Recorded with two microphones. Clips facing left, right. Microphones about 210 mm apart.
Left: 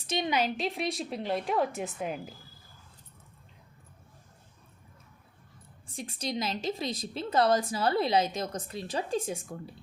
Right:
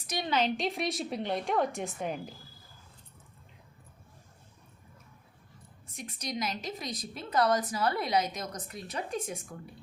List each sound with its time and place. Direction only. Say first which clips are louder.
0.3 s a woman's voice: right 3 dB; 10° left (ahead or behind)
5.9 s a woman's voice: left 3 dB; 30° left (ahead or behind)